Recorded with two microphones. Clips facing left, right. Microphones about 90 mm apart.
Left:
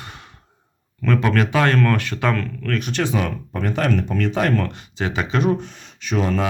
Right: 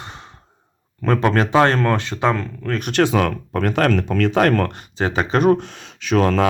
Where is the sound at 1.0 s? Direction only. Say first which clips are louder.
Right 2 dB; 40° right (ahead or behind); by 2.7 s 20° right (ahead or behind).